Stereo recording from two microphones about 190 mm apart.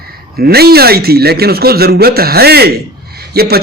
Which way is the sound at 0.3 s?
55° right (ahead or behind).